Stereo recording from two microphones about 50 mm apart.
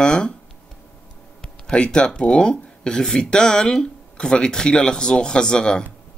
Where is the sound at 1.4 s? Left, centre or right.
Centre.